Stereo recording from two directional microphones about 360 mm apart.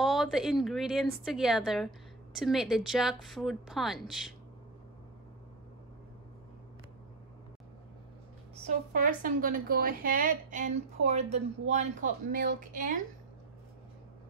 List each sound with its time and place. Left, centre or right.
0.0 s a woman's voice: centre
8.6 s a woman's voice: right